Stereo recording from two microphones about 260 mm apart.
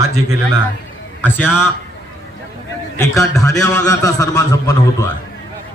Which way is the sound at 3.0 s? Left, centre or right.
Centre.